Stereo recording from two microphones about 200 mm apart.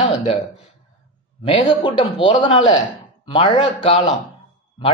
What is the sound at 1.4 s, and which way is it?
Speech, 25° left (ahead or behind).